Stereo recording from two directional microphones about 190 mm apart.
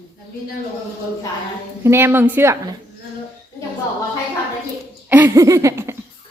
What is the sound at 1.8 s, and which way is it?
Speech, 15° right (ahead or behind).